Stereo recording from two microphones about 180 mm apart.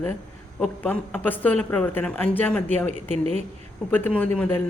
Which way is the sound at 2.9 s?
40° right (ahead or behind).